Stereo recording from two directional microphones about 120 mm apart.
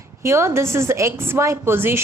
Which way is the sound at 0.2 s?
20° right (ahead or behind).